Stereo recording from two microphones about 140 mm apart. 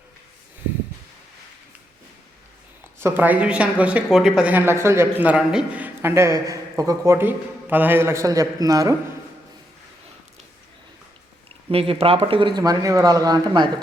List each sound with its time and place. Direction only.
3.0 s speech: 15° right (ahead or behind)
11.7 s speech: 45° right (ahead or behind)